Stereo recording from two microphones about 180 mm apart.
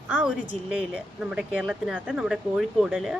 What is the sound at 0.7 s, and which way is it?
Speech, 5° right (ahead or behind).